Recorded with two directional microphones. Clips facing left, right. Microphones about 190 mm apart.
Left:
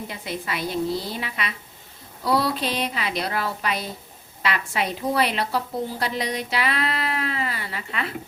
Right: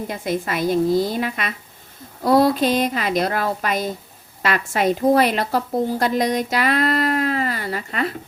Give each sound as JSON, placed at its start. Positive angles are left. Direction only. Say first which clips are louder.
{"t": 0.1, "sound": "a woman's voice", "louder": "right 7 dB", "side_deg": -45}